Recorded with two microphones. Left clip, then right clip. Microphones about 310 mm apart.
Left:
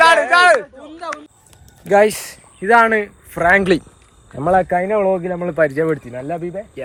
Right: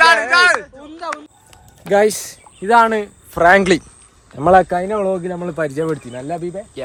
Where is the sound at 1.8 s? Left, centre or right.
Centre.